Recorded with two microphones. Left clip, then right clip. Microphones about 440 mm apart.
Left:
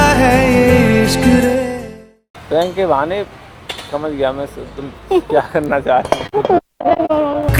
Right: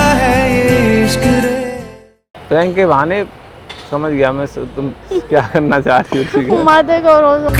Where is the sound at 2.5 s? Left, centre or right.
Right.